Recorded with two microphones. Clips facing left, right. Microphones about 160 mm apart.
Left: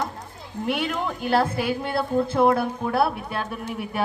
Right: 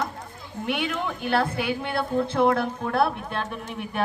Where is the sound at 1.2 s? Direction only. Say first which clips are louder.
Left 3 dB; 40° left (ahead or behind).